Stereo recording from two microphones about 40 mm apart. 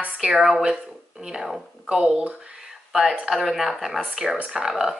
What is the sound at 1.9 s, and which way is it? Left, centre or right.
Speech, centre.